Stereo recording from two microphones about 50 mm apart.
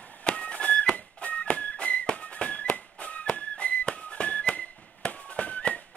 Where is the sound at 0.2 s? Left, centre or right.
Left.